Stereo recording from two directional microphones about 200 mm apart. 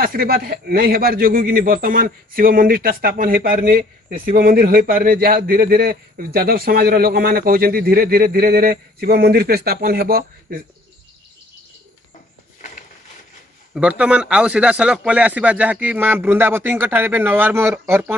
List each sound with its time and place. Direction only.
0.0 s a man's voice: 45° right (ahead or behind)
13.7 s speech: 5° right (ahead or behind)